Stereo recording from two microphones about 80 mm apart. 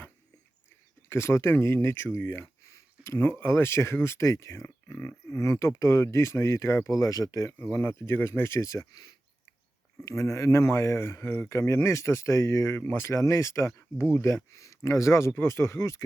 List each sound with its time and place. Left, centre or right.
1.1 s speech: left
7.0 s speech: left
7.6 s speech: left
10.1 s speech: left